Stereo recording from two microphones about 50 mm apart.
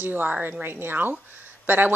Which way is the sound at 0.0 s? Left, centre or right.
Right.